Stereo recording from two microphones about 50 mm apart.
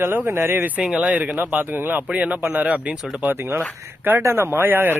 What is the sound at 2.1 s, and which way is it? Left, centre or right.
Speech, right.